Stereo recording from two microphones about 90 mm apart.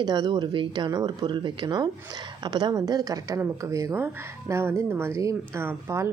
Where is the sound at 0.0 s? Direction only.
50° right (ahead or behind).